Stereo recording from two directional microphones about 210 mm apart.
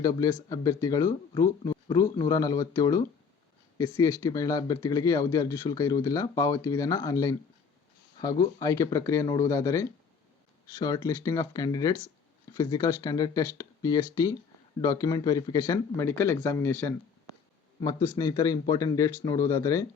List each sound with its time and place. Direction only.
0.0 s speech: 15° left (ahead or behind)